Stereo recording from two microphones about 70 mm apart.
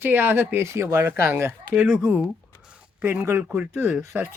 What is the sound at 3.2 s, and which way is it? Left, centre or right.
Speech, right.